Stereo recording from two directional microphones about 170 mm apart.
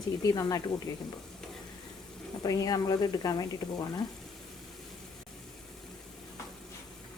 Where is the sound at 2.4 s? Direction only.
20° left (ahead or behind).